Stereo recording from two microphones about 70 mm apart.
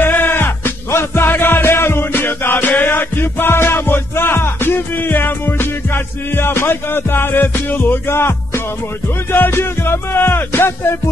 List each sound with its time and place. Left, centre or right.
0.0 s music: left